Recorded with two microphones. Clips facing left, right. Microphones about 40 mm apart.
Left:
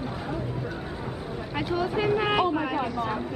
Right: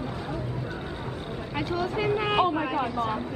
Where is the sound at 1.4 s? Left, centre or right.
Centre.